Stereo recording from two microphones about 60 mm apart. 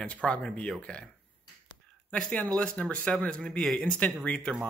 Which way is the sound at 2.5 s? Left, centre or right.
Centre.